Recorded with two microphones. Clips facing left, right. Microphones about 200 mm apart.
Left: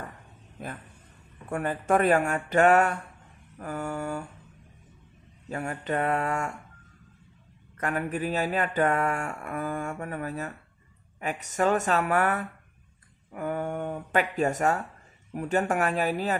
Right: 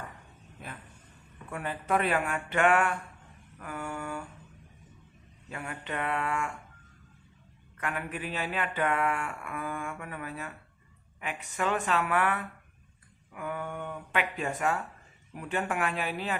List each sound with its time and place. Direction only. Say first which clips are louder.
1.5 s speech: left 5 dB; 45° left (ahead or behind)
3.5 s mantra: left 5 dB; 40° left (ahead or behind)
5.5 s speech: left 7 dB; 40° left (ahead or behind)
7.8 s mantra: left 6 dB; 40° left (ahead or behind)
11.1 s speech: left 6 dB; 40° left (ahead or behind)